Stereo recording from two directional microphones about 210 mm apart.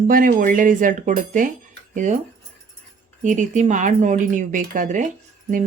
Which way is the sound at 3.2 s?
35° right (ahead or behind).